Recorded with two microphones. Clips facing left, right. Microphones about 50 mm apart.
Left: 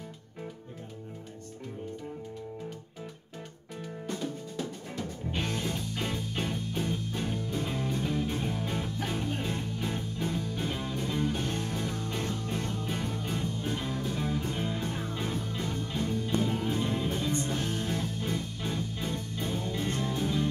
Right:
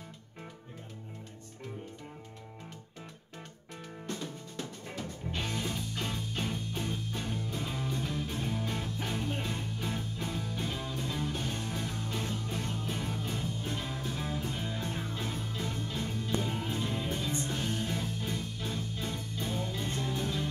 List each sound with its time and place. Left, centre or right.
4.1 s music: centre